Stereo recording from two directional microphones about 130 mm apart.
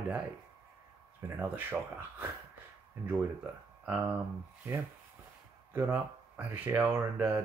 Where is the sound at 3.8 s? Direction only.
15° right (ahead or behind).